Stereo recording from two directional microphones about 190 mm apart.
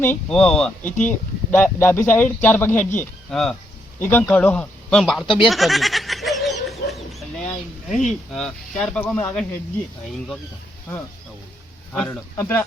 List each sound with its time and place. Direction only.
0.0 s speech: 5° left (ahead or behind)
5.2 s speech: 25° left (ahead or behind)
5.5 s chicken: centre (ahead or behind)
8.0 s speech: centre (ahead or behind)
11.9 s speech: 10° left (ahead or behind)